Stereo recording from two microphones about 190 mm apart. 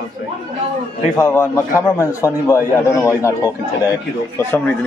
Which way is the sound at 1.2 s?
15° left (ahead or behind).